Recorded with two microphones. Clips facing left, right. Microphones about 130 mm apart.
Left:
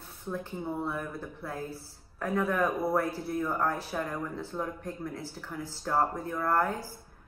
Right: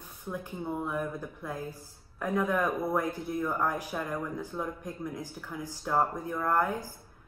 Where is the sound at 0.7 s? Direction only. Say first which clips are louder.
Right 2 dB; 15° right (ahead or behind).